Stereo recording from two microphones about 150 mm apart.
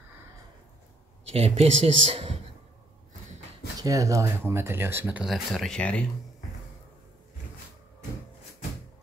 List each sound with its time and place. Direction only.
1.2 s speech: 45° right (ahead or behind)
3.8 s speech: 20° right (ahead or behind); by 6.0 s 5° left (ahead or behind)